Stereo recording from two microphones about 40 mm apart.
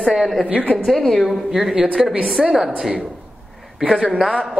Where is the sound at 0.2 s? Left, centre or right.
Centre.